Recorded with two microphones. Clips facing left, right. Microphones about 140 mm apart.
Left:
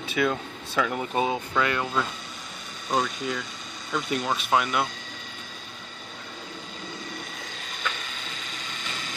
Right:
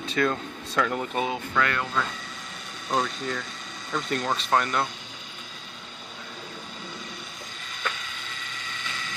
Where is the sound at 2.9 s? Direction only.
5° left (ahead or behind).